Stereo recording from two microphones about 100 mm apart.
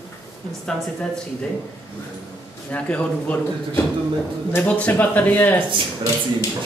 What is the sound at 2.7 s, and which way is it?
Speech, 15° left (ahead or behind).